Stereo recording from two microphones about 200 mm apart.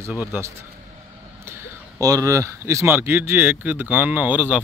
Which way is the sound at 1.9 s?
15° right (ahead or behind).